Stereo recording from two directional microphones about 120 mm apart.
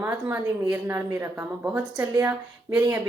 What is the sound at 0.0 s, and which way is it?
A woman's voice, 20° right (ahead or behind).